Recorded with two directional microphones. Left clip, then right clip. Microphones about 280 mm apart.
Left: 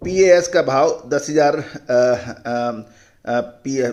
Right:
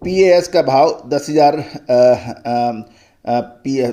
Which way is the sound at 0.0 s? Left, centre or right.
Right.